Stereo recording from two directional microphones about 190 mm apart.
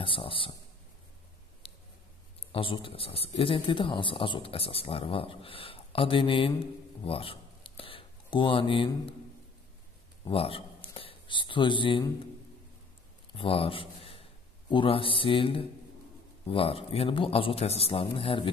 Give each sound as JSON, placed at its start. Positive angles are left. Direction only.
{"t": 0.0, "sound": "a man's voice", "side_deg": 25}
{"t": 1.6, "sound": "a sound", "side_deg": 30}
{"t": 2.5, "sound": "a man's voice", "side_deg": 25}
{"t": 10.2, "sound": "speech", "side_deg": 30}
{"t": 13.3, "sound": "a man's voice", "side_deg": 30}